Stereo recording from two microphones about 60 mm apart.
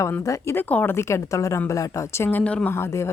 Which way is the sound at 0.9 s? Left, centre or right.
Left.